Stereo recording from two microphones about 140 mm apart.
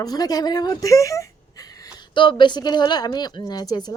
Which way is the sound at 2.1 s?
35° left (ahead or behind).